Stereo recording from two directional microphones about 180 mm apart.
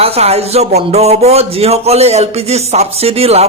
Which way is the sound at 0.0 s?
35° right (ahead or behind).